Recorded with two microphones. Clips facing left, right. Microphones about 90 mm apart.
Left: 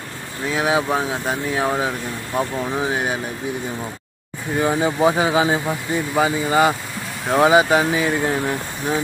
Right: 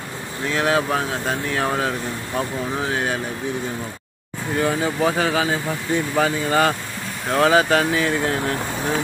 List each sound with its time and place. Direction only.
0.5 s speech: 10° left (ahead or behind)
4.6 s speech: 20° left (ahead or behind)